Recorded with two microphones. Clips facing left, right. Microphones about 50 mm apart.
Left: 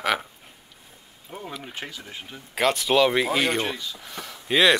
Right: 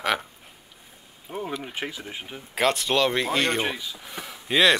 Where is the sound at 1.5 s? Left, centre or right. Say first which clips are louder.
Right 4 dB; centre.